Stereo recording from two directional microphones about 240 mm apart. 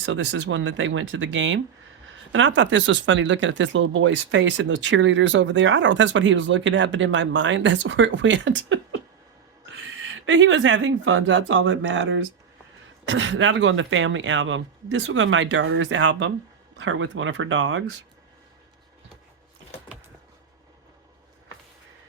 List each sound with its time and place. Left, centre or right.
0.0 s speech: right